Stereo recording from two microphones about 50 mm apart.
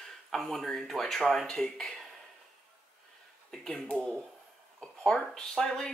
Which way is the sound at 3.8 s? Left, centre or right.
Centre.